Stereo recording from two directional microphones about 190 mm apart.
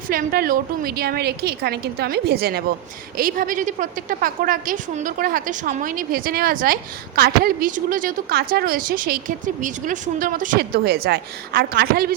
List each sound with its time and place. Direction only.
0.1 s a woman's voice: 50° right (ahead or behind)